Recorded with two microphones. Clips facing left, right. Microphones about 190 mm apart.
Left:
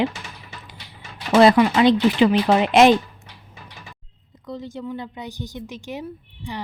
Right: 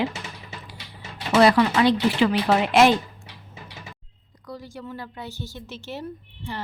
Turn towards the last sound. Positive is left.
turn(degrees=15)  # may be behind; listen again after turning